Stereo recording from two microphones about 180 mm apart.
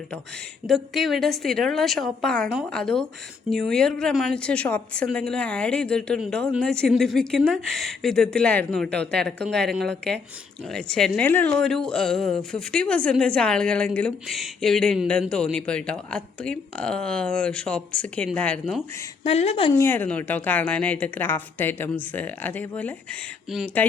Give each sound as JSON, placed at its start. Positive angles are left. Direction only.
{"t": 0.7, "sound": "a woman's voice", "side_deg": 0}
{"t": 19.2, "sound": "a woman's voice", "side_deg": 35}
{"t": 19.7, "sound": "a woman's voice", "side_deg": 15}
{"t": 23.5, "sound": "a woman's voice", "side_deg": 0}